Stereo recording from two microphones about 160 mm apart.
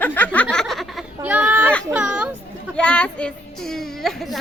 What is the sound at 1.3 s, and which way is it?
Speech, 10° right (ahead or behind).